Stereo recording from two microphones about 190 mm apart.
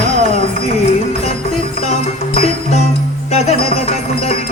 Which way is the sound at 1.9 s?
35° left (ahead or behind).